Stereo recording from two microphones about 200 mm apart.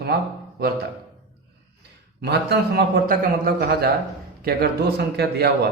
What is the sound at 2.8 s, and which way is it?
A man's voice, 45° right (ahead or behind).